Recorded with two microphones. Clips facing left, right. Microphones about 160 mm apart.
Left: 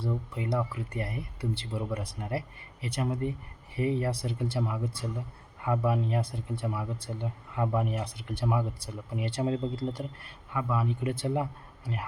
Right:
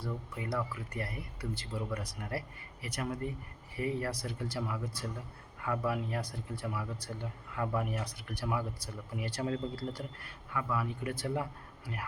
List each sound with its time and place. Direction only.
0.0 s speech: 25° left (ahead or behind)